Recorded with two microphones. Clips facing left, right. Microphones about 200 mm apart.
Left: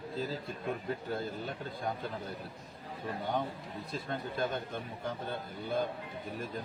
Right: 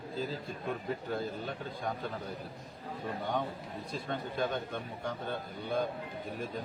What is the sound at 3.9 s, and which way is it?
Speech, centre (ahead or behind).